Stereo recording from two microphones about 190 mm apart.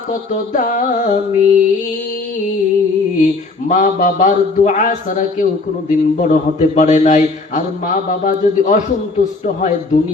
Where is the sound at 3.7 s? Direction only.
45° left (ahead or behind).